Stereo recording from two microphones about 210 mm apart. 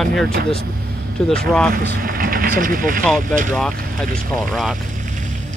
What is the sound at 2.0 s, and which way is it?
Vehicle, 45° right (ahead or behind).